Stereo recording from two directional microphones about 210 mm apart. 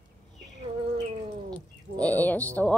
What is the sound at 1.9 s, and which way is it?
Speech, 10° left (ahead or behind).